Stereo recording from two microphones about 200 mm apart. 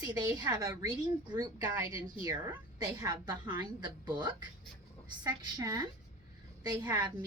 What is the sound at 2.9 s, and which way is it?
Speech, 20° right (ahead or behind).